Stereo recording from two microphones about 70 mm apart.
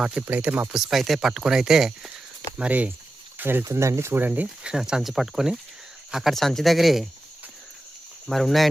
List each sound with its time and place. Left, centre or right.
0.2 s speech: right
0.7 s speech: centre
2.6 s speech: right
3.7 s speech: right
4.2 s speech: right
4.6 s speech: centre
8.3 s speech: centre